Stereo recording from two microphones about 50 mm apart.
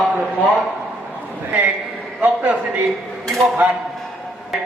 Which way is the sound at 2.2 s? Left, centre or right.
Right.